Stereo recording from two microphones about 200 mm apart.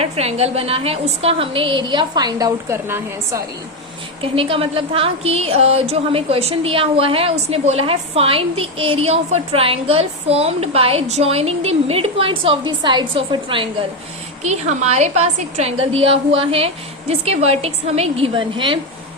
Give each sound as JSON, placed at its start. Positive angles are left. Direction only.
{"t": 0.0, "sound": "a woman's voice", "side_deg": -30}
{"t": 4.2, "sound": "a woman's voice", "side_deg": -25}